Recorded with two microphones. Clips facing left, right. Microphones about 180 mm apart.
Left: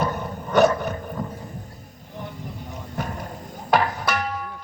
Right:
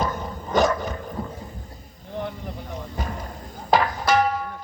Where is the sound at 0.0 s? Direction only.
65° left (ahead or behind).